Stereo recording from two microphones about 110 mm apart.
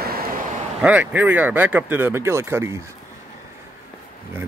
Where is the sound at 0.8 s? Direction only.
15° right (ahead or behind).